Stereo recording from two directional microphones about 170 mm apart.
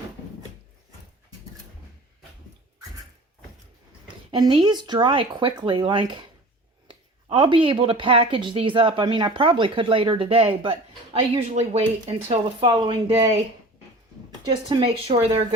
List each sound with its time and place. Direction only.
4.1 s speech: 25° right (ahead or behind)
12.3 s speech: 30° right (ahead or behind)
14.7 s speech: 30° right (ahead or behind)